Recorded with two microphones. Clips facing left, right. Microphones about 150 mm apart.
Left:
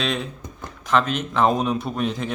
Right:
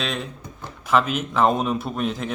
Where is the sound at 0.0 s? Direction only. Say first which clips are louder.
Left 2 dB; centre (ahead or behind).